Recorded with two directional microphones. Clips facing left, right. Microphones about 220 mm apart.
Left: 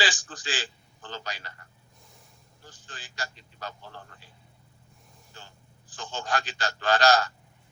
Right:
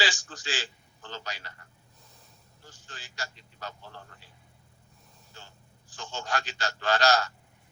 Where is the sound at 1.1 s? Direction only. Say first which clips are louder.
Left 2 dB; 35° left (ahead or behind).